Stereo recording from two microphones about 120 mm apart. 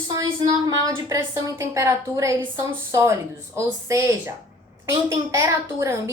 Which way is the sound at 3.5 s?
25° right (ahead or behind).